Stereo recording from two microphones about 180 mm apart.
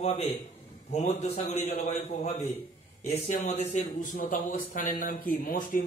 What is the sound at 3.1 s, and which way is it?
A man's voice, 35° left (ahead or behind).